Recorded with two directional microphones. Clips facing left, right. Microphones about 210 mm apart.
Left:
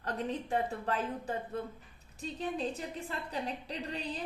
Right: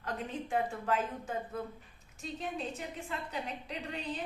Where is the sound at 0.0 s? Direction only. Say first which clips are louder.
Left 3 dB; 35° left (ahead or behind).